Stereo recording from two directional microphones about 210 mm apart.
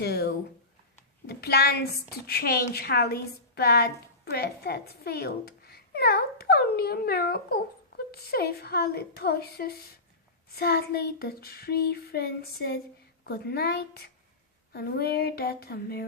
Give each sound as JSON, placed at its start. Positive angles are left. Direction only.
{"t": 0.0, "sound": "a woman's voice", "side_deg": 50}